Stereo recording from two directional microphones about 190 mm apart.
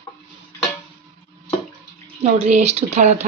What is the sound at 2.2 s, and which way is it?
Speech, 35° right (ahead or behind).